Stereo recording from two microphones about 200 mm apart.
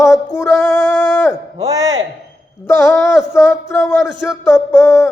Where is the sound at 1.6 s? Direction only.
20° right (ahead or behind).